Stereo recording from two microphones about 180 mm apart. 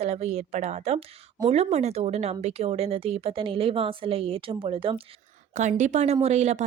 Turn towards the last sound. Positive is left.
turn(degrees=-40)  # may be behind; listen again after turning